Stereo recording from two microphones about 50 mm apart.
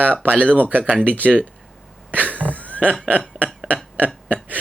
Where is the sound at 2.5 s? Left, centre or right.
Left.